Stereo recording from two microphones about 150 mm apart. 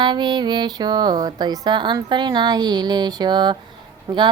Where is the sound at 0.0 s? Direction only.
30° right (ahead or behind).